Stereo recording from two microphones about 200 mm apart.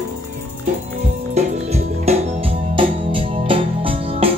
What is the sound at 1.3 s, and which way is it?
Music, 35° right (ahead or behind).